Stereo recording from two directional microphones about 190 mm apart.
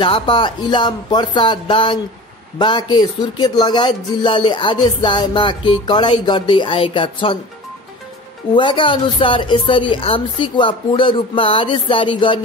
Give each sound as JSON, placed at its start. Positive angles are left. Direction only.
{"t": 0.0, "sound": "speech", "side_deg": 25}
{"t": 8.5, "sound": "speech", "side_deg": 25}